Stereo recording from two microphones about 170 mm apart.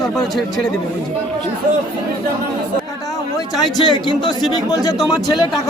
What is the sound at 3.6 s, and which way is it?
Speech, 25° left (ahead or behind).